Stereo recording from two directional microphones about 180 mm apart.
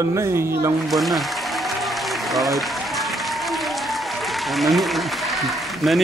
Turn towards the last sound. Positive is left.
turn(degrees=0)  # may be behind; listen again after turning